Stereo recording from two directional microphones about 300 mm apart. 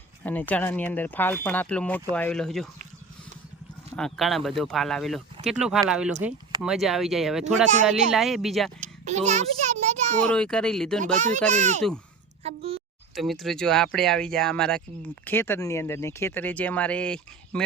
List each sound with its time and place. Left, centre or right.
0.2 s speech: centre
3.9 s speech: centre
7.5 s speech: right
8.1 s speech: centre
8.8 s a sound: right
10.2 s speech: centre
11.4 s a child's voice: right
13.1 s speech: centre